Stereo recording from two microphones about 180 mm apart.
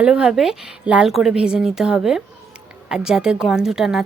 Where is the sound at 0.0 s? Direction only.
5° right (ahead or behind).